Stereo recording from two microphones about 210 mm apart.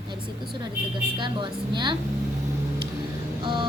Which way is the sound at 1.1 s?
20° right (ahead or behind).